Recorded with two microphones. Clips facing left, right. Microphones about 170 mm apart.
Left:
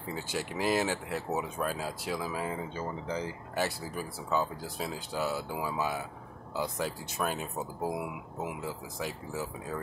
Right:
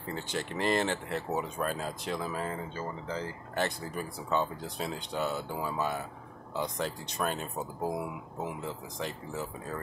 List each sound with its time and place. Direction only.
0.0 s speech: 10° left (ahead or behind)